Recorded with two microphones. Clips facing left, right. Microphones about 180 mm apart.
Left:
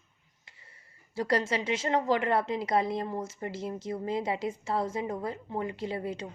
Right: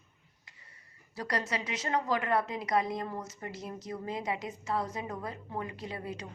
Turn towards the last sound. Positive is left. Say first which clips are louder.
# left 6 dB
turn(degrees=25)  # may be behind; listen again after turning